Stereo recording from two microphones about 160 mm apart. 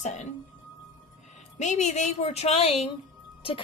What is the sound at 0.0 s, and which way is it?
Speech, 45° left (ahead or behind).